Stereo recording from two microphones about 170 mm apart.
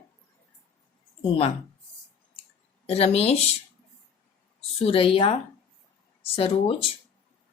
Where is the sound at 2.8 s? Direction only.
35° left (ahead or behind).